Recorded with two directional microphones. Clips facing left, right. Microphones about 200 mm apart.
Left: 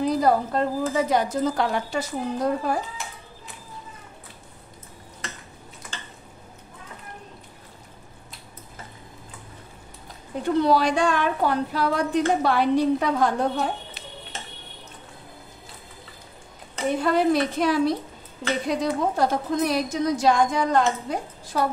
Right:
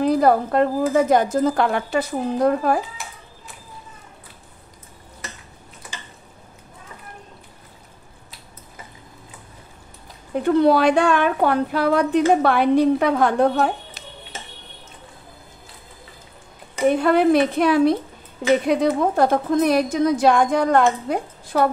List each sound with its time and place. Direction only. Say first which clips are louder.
0.0 s a woman's voice: right 4 dB; 60° right (ahead or behind)
10.4 s a woman's voice: right 5 dB; 60° right (ahead or behind)
17.0 s a woman's voice: right 3 dB; 60° right (ahead or behind)